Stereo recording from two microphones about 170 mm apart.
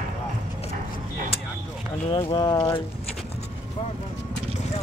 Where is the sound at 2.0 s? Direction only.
25° left (ahead or behind).